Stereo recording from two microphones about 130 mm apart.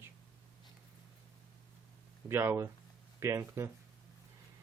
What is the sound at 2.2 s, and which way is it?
Speech, 20° right (ahead or behind).